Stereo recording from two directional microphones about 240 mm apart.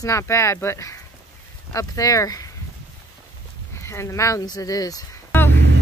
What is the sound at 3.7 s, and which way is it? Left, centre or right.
Speech, centre.